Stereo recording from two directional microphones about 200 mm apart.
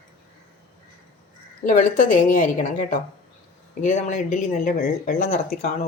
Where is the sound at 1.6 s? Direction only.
40° left (ahead or behind).